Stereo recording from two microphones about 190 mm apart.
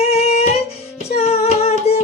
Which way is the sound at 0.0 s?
35° left (ahead or behind).